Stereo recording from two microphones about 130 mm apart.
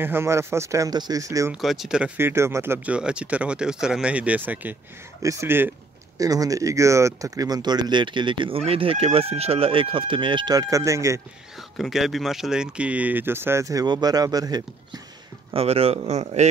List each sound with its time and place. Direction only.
0.0 s speech: 20° right (ahead or behind)
1.5 s speech: centre (ahead or behind)
2.1 s speech: 20° right (ahead or behind)
5.2 s speech: 20° right (ahead or behind)
11.7 s speech: centre (ahead or behind); by 14.6 s 30° right (ahead or behind)
15.5 s speech: 50° right (ahead or behind)